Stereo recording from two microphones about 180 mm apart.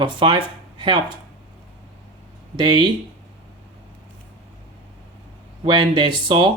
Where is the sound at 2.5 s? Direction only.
25° right (ahead or behind).